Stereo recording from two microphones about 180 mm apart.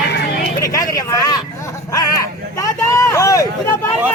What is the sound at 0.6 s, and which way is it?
Vehicle, 20° left (ahead or behind).